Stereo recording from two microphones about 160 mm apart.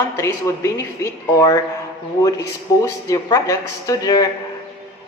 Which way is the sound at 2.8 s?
20° left (ahead or behind).